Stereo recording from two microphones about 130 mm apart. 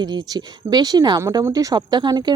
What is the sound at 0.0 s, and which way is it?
Speech, 30° right (ahead or behind).